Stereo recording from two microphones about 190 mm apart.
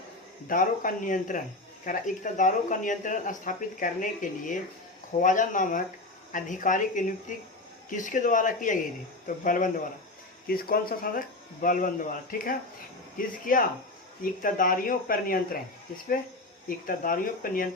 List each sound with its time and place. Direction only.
0.4 s speech: 45° left (ahead or behind)
16.6 s speech: 45° left (ahead or behind)